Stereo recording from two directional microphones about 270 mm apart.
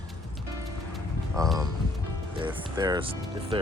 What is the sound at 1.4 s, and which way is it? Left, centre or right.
Speech, centre.